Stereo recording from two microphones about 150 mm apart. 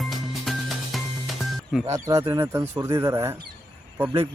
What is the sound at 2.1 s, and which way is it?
Speech, 20° right (ahead or behind).